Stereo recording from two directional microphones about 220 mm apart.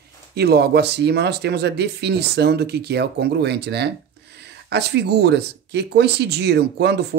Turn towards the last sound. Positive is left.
turn(degrees=-50)  # may be behind; listen again after turning